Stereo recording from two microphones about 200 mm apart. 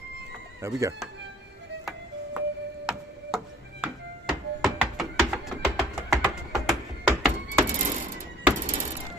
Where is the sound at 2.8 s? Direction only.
Centre (ahead or behind).